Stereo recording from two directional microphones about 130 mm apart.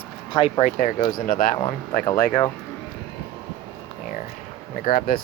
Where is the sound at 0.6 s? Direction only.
85° left.